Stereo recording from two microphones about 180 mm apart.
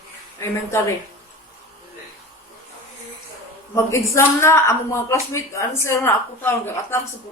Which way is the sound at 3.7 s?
15° left (ahead or behind).